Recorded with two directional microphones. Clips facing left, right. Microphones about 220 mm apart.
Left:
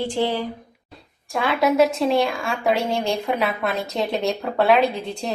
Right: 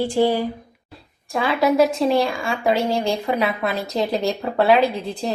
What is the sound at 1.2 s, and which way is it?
A woman's voice, centre (ahead or behind).